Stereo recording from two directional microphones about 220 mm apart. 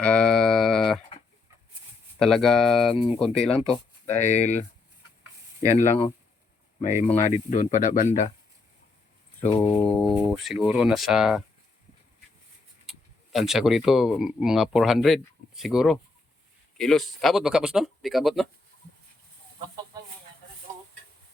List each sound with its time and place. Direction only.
0.0 s a sound: 5° left (ahead or behind)
2.1 s speech: centre (ahead or behind)
3.7 s speech: 30° left (ahead or behind)
5.6 s speech: 30° left (ahead or behind)
9.4 s speech: 10° left (ahead or behind)
10.0 s speech: 5° right (ahead or behind)
12.8 s speech: centre (ahead or behind)